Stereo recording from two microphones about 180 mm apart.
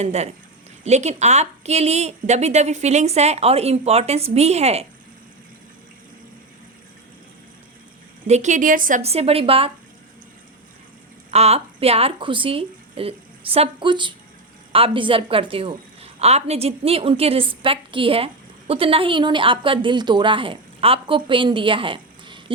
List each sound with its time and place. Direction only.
0.0 s a woman's voice: 35° right (ahead or behind)
8.3 s a woman's voice: 40° right (ahead or behind)
9.0 s a woman's voice: 35° right (ahead or behind)
11.3 s a woman's voice: 35° right (ahead or behind)